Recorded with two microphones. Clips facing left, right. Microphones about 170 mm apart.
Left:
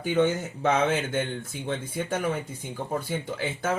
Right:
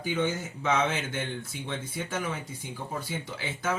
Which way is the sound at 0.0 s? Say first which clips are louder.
Left 5 dB; 55° left (ahead or behind).